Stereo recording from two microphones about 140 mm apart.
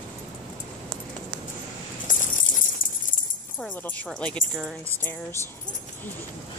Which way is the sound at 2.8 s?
80° left.